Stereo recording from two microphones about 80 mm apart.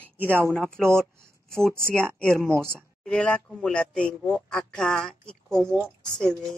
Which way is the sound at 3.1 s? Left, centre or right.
Centre.